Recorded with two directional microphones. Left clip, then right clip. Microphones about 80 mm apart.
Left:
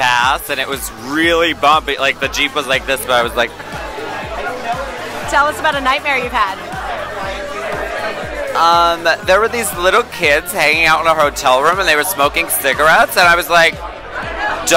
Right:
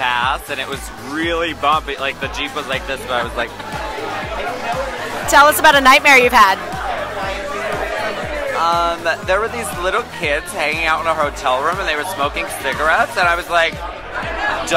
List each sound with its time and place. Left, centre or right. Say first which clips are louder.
0.0 s music: left 4 dB; left
1.1 s speech: left 6 dB; left
5.3 s a woman's voice: right 5 dB; right
8.5 s speech: left 6 dB; left